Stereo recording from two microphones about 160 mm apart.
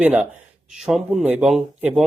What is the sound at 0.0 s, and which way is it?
Speech, 10° right (ahead or behind).